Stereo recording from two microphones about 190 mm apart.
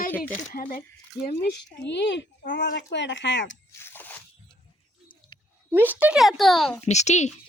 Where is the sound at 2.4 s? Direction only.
45° left (ahead or behind).